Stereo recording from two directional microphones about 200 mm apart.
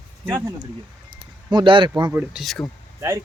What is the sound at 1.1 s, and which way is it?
Speech, 25° right (ahead or behind).